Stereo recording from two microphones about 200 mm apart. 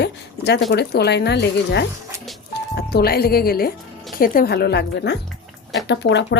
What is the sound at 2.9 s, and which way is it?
A woman's voice, 50° left (ahead or behind).